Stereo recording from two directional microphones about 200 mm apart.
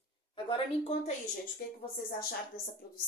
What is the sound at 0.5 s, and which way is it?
Speech, 30° left (ahead or behind).